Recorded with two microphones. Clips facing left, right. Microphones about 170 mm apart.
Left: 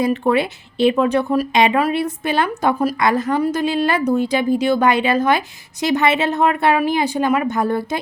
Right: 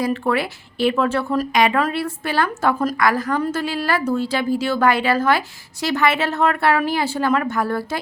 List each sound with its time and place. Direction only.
0.0 s a woman's voice: 20° left (ahead or behind)